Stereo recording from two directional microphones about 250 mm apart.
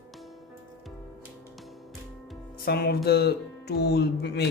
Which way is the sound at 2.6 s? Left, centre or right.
Left.